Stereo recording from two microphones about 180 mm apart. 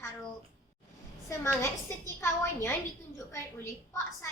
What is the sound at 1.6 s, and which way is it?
A child's voice, 15° left (ahead or behind).